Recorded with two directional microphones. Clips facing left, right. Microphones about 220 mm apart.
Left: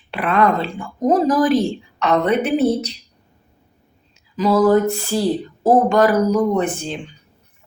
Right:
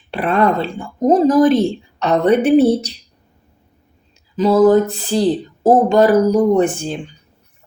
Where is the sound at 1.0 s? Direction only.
25° right (ahead or behind).